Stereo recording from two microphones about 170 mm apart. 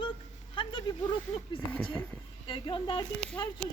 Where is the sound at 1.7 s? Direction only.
5° left (ahead or behind).